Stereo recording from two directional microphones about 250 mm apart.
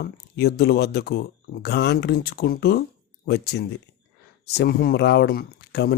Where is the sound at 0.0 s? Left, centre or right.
Left.